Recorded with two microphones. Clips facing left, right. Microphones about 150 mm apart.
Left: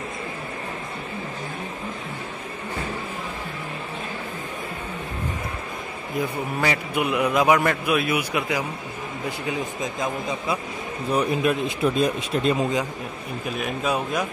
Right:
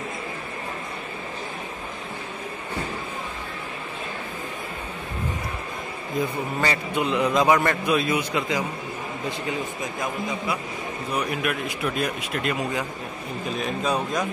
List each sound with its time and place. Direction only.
6.1 s a man's voice: 10° left (ahead or behind)
11.1 s speech: 25° left (ahead or behind)
13.6 s a man's voice: 5° left (ahead or behind)